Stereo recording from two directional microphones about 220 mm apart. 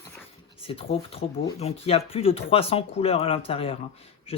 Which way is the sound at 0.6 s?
25° left (ahead or behind).